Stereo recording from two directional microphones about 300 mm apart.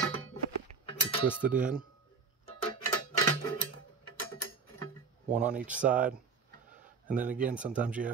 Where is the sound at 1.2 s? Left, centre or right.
Centre.